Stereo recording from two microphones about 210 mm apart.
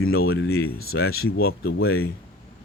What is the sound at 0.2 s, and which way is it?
Speech, 50° left (ahead or behind).